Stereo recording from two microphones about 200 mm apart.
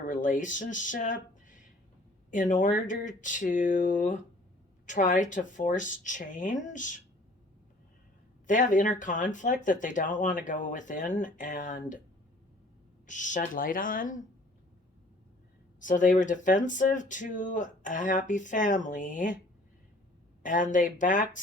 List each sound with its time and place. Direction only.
0.1 s speech: 40° left (ahead or behind)
8.4 s speech: 40° left (ahead or behind)
13.1 s speech: 40° left (ahead or behind)
15.8 s speech: 40° left (ahead or behind)
20.4 s speech: 40° left (ahead or behind)